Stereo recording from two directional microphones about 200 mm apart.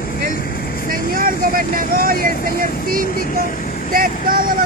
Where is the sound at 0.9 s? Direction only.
45° right (ahead or behind).